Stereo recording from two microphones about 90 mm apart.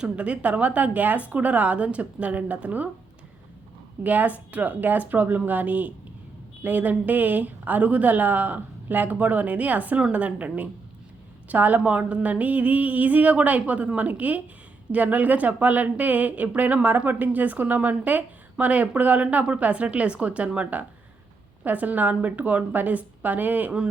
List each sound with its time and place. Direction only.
0.0 s speech: 15° right (ahead or behind)
4.0 s a woman's voice: 20° right (ahead or behind)